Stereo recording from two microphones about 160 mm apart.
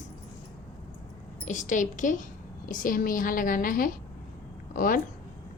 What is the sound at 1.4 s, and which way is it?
A woman's voice, 50° left (ahead or behind).